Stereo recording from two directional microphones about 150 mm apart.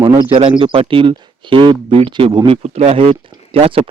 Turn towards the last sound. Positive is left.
turn(degrees=-40)  # may be behind; listen again after turning